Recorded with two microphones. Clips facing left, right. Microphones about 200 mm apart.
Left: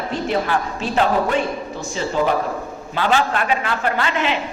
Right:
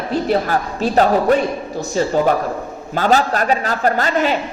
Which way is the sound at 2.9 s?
40° right (ahead or behind).